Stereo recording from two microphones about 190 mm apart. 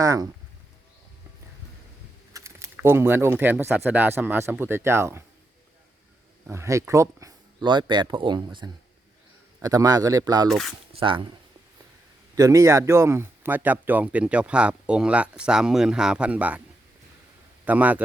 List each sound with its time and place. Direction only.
0.0 s speech: 15° right (ahead or behind)
2.3 s speech: 15° right (ahead or behind)
6.5 s speech: 15° right (ahead or behind)
10.5 s speech: centre (ahead or behind)
10.9 s speech: 25° right (ahead or behind)
12.4 s speech: 15° right (ahead or behind)
17.7 s speech: 10° right (ahead or behind)